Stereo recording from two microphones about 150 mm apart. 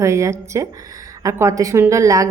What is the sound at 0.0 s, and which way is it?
A woman's voice, 20° right (ahead or behind).